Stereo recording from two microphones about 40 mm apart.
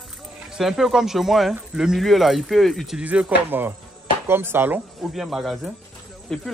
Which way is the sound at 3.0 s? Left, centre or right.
Right.